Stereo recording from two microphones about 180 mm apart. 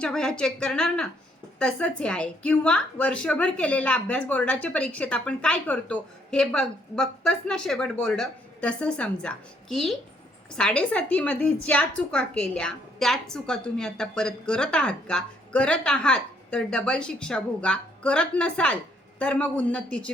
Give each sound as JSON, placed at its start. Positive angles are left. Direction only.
{"t": 0.0, "sound": "a woman's voice", "side_deg": 5}